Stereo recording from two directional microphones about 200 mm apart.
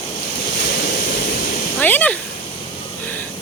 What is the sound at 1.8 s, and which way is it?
Speech, 10° left (ahead or behind).